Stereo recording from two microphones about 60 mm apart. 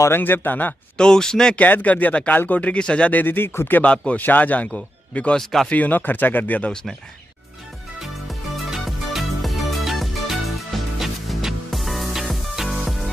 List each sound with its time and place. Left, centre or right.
0.2 s speech: left
0.9 s speech: centre
1.6 s speech: left
3.8 s speech: centre
5.4 s speech: centre
5.7 s speech: left
6.7 s speech: centre
8.0 s music: centre